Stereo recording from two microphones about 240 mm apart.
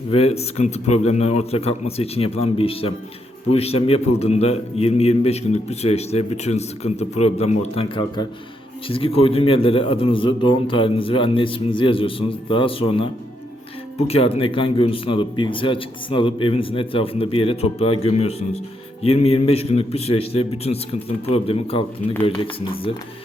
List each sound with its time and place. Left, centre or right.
0.1 s a man's voice: left
14.1 s a man's voice: left